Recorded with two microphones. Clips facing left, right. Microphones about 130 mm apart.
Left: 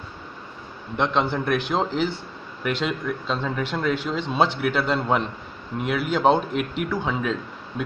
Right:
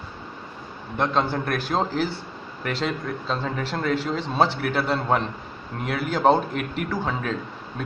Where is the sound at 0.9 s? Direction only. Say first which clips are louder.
Left 1 dB; centre (ahead or behind).